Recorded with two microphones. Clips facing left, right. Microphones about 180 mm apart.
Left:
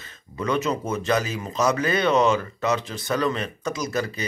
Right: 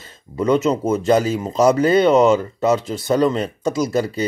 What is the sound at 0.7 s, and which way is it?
Speech, 30° right (ahead or behind).